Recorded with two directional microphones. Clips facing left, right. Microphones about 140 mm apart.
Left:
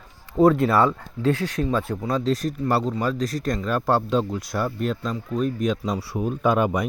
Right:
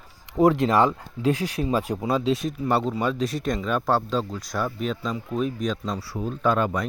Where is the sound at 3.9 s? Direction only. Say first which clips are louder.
Left 4 dB; 10° left (ahead or behind).